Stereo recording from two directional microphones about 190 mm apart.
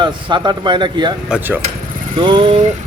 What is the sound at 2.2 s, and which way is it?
Speech, 25° right (ahead or behind).